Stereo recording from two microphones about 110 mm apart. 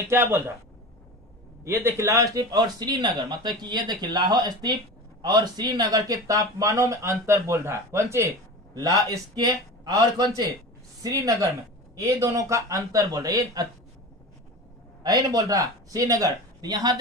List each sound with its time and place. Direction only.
0.1 s speech: 25° right (ahead or behind)
1.6 s speech: 20° right (ahead or behind)
8.8 s speech: 35° right (ahead or behind)
15.0 s speech: 30° right (ahead or behind)